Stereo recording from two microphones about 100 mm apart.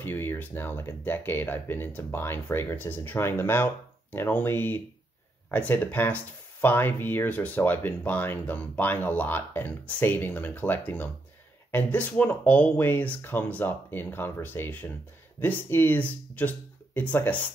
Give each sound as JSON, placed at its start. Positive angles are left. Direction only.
{"t": 0.0, "sound": "speech", "side_deg": 20}